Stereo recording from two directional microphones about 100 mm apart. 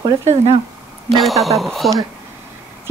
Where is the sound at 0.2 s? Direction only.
90° right.